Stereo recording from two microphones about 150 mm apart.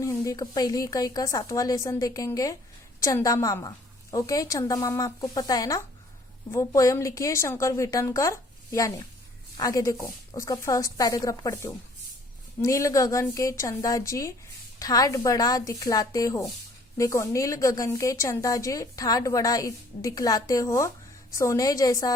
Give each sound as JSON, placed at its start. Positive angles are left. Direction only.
{"t": 0.0, "sound": "a woman's voice", "side_deg": 20}